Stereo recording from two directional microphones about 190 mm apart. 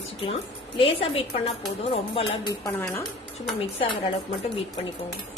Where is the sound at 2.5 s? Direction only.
15° left (ahead or behind).